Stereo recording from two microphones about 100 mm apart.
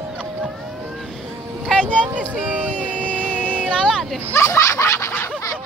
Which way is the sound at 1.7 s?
10° left (ahead or behind).